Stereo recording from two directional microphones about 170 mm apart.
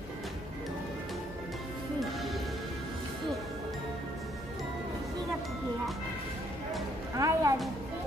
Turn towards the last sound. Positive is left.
turn(degrees=-20)  # may be behind; listen again after turning